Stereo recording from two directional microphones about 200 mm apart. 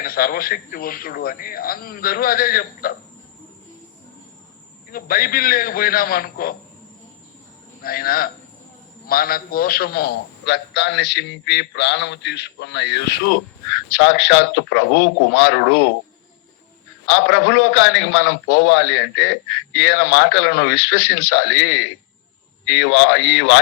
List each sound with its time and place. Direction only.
0.0 s speech: 45° left (ahead or behind)
4.9 s speech: 45° left (ahead or behind)
7.8 s a man's voice: 45° left (ahead or behind); by 15.9 s 70° left (ahead or behind)
17.1 s a man's voice: 90° left